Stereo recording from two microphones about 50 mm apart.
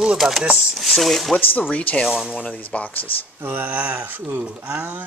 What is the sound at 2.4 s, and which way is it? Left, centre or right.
Speech, left.